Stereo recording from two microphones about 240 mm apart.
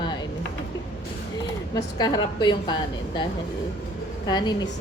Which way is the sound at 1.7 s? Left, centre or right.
Centre.